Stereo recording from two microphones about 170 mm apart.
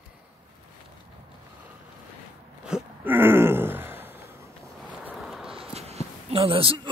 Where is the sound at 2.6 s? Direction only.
10° right (ahead or behind).